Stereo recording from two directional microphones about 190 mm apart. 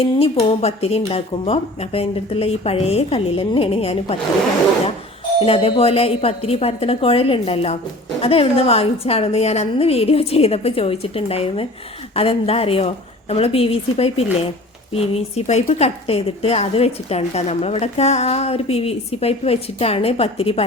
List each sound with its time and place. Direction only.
0.4 s a woman's voice: 30° left (ahead or behind)
5.5 s a woman's voice: 30° left (ahead or behind)